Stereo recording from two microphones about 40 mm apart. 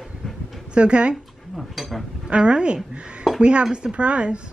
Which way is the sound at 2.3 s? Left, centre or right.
Right.